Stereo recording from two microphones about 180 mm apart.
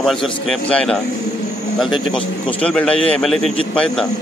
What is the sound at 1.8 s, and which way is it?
Speech, 25° left (ahead or behind).